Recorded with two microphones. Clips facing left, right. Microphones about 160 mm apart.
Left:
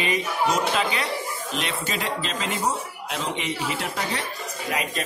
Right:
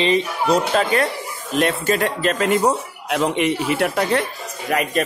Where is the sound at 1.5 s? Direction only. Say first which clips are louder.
Right 12 dB; 50° right (ahead or behind).